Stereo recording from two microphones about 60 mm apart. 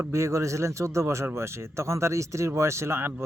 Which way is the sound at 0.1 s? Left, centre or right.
Right.